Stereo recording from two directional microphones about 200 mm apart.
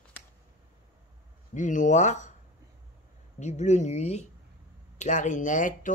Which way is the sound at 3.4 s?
35° left (ahead or behind).